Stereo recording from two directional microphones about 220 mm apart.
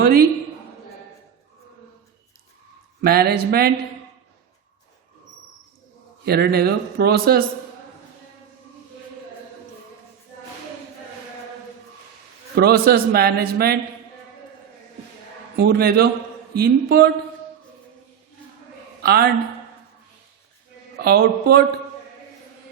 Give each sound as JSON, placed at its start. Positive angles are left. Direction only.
{"t": 0.0, "sound": "a man's voice", "side_deg": -45}
{"t": 3.0, "sound": "a man's voice", "side_deg": -45}
{"t": 6.2, "sound": "a man's voice", "side_deg": -45}
{"t": 12.5, "sound": "a man's voice", "side_deg": -45}
{"t": 15.5, "sound": "a man's voice", "side_deg": -45}
{"t": 19.0, "sound": "speech", "side_deg": -45}
{"t": 21.0, "sound": "a man's voice", "side_deg": -45}